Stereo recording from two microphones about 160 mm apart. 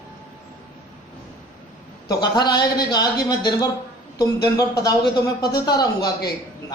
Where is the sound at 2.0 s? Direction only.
25° left (ahead or behind).